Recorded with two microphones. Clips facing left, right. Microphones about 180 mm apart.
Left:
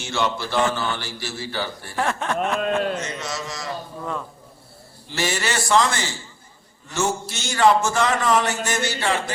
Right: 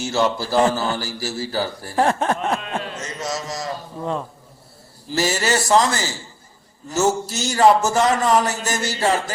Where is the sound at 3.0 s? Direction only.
40° right (ahead or behind).